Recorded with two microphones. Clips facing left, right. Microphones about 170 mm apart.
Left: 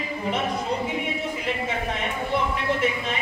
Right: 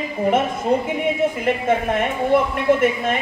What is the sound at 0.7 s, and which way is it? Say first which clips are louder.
Speech: right 7 dB; 50° right (ahead or behind).